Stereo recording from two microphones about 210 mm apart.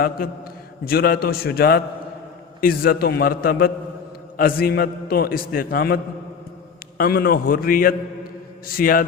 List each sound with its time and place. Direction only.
0.9 s a man's voice: 45° left (ahead or behind)